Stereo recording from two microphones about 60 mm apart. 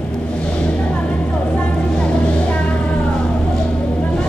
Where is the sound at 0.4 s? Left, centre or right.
Centre.